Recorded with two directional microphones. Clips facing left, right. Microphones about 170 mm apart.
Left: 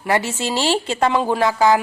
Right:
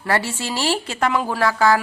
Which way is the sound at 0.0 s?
20° left (ahead or behind).